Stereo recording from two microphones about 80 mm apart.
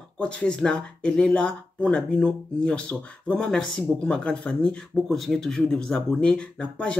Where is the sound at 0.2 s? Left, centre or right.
Centre.